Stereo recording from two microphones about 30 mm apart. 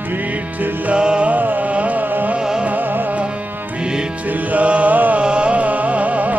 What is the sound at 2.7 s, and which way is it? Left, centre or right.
Music, right.